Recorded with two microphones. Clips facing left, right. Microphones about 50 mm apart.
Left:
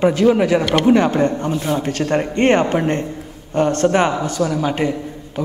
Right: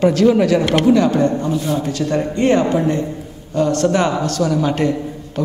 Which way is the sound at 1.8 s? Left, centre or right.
Left.